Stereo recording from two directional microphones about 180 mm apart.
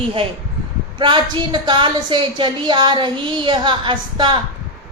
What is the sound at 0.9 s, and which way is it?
A woman's voice, 25° right (ahead or behind).